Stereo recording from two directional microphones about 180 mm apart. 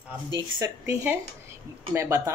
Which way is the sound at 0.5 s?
15° right (ahead or behind).